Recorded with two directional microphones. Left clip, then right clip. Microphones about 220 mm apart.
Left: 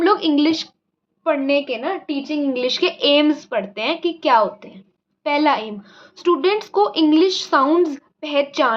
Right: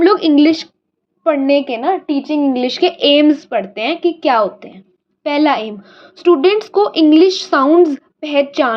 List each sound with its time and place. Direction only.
0.0 s a woman's voice: 15° right (ahead or behind)